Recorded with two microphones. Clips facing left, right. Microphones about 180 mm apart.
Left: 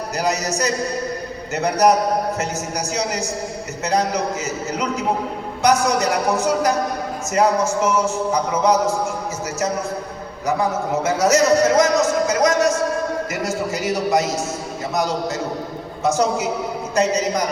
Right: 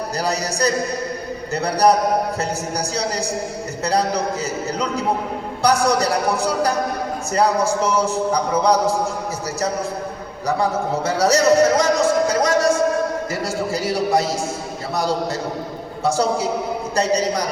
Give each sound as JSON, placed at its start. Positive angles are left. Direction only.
{"t": 0.2, "sound": "a man's voice", "side_deg": -35}
{"t": 5.6, "sound": "a man's voice", "side_deg": -35}
{"t": 10.4, "sound": "a man's voice", "side_deg": -35}
{"t": 12.3, "sound": "a sound", "side_deg": -30}
{"t": 13.3, "sound": "a man's voice", "side_deg": -30}
{"t": 16.0, "sound": "a man's voice", "side_deg": -30}